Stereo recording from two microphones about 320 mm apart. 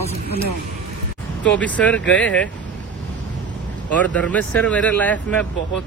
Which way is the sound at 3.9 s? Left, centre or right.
Centre.